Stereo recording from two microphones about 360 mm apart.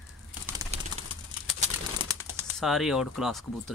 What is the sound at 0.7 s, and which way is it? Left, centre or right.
Bird, centre.